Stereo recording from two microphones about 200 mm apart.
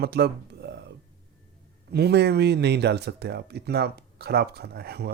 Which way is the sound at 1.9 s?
55° right (ahead or behind).